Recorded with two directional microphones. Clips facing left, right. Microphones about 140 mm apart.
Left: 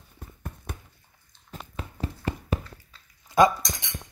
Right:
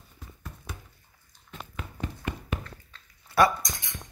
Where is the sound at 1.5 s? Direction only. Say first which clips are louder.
Left 2 dB; 35° left (ahead or behind).